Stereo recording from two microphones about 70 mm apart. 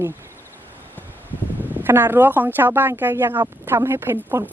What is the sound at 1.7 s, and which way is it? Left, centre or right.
Speech, right.